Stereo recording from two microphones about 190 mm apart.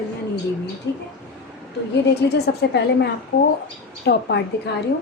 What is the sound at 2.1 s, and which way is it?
Speech, 60° left (ahead or behind).